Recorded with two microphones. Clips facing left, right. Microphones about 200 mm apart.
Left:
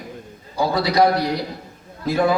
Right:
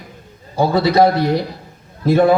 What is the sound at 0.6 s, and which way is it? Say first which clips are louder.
Speech: right 4 dB; 25° right (ahead or behind).